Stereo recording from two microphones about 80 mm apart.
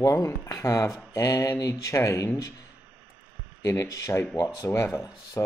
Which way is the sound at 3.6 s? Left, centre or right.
Left.